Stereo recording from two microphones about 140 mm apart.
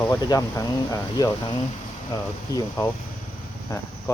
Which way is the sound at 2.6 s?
25° left (ahead or behind).